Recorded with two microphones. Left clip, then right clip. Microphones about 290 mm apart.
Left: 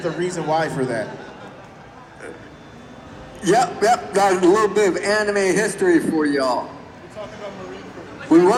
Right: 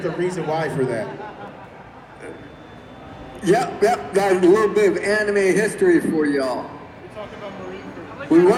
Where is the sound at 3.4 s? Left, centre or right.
Centre.